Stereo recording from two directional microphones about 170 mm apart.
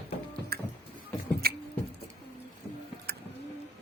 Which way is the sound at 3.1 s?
70° right (ahead or behind).